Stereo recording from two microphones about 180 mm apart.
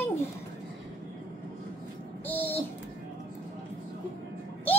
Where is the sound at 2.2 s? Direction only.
10° left (ahead or behind).